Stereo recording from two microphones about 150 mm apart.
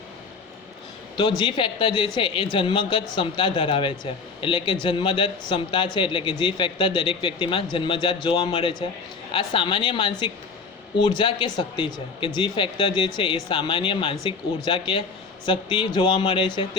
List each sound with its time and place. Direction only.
1.1 s a man's voice: 30° left (ahead or behind)